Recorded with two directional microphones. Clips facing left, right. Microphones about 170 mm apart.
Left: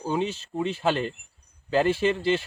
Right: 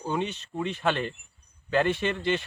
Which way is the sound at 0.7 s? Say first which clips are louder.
Left 1 dB; 30° left (ahead or behind).